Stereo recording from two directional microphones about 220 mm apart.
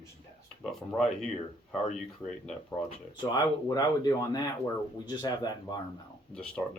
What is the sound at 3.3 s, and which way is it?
Speech, 15° left (ahead or behind).